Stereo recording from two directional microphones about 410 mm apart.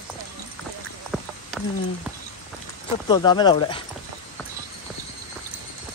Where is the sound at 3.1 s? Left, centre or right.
Centre.